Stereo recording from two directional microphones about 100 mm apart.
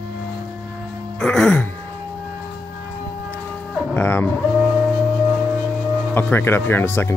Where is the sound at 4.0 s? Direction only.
20° left (ahead or behind).